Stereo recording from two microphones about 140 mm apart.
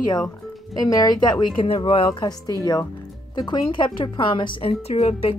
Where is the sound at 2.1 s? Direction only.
30° left (ahead or behind); by 5.3 s 50° left (ahead or behind).